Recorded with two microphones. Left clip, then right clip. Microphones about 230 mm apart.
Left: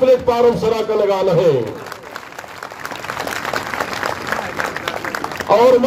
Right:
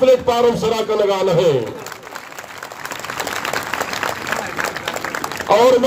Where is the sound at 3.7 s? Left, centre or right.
Right.